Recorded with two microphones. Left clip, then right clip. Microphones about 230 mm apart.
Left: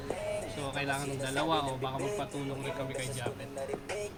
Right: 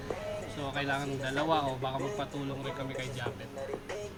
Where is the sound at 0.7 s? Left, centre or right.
Centre.